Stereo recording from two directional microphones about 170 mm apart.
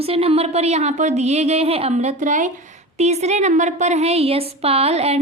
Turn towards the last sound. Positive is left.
turn(degrees=-40)  # may be behind; listen again after turning